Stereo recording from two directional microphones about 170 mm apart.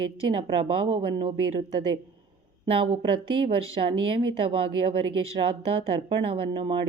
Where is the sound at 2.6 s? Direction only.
30° right (ahead or behind).